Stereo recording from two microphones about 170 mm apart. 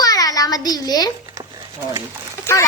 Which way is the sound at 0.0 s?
20° left (ahead or behind).